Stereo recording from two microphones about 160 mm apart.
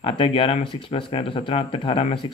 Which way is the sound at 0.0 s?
35° left (ahead or behind).